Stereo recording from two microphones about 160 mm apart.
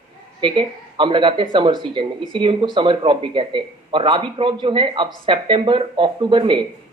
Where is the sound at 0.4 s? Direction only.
30° right (ahead or behind).